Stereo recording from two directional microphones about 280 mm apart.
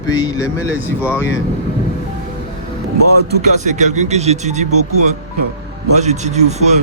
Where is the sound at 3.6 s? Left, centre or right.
Right.